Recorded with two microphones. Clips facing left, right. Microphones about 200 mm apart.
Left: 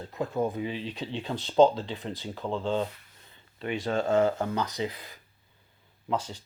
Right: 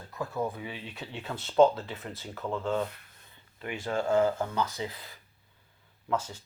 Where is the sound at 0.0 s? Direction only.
20° left (ahead or behind).